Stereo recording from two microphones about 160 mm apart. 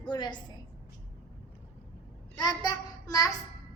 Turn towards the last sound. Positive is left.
turn(degrees=20)  # may be behind; listen again after turning